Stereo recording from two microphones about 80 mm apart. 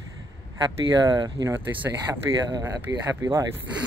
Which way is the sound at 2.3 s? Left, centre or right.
Right.